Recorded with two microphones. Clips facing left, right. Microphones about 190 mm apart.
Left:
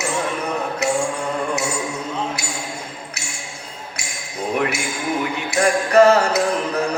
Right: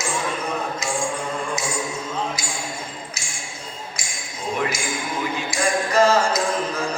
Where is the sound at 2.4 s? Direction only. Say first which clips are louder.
Left 2 dB; 65° left (ahead or behind).